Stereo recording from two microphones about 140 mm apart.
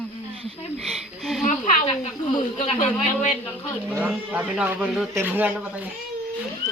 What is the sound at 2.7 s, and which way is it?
Speech, 50° left (ahead or behind).